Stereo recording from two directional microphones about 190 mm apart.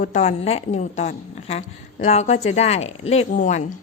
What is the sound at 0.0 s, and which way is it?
A woman's voice, 35° left (ahead or behind).